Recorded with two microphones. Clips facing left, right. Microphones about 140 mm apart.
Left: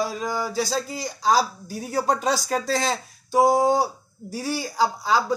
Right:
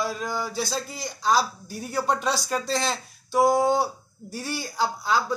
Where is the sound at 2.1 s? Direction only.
40° left (ahead or behind).